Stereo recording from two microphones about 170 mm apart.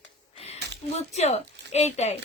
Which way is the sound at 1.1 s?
40° left (ahead or behind).